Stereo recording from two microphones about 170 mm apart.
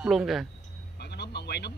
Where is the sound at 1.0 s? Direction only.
80° left.